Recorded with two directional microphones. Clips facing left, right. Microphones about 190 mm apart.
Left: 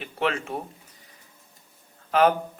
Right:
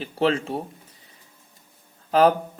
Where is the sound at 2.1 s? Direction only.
35° right (ahead or behind).